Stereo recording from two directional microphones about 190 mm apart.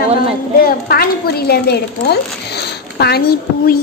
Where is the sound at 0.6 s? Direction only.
55° left (ahead or behind).